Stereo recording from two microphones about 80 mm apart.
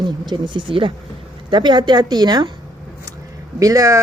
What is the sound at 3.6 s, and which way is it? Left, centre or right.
Speech, right.